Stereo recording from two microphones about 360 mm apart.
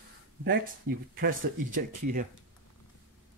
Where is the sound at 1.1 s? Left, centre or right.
Right.